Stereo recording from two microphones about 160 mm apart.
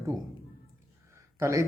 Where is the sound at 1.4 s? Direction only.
20° right (ahead or behind).